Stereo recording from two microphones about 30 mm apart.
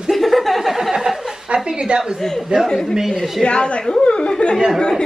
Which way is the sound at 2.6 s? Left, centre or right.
Centre.